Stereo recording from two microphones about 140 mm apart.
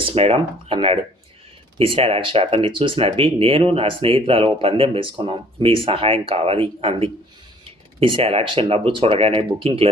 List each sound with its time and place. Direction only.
0.1 s speech: 45° right (ahead or behind)